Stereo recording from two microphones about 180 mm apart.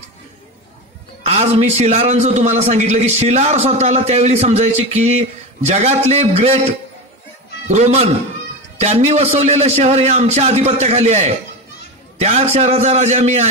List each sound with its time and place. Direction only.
1.2 s a man's voice: 35° right (ahead or behind)
7.6 s a man's voice: 40° right (ahead or behind)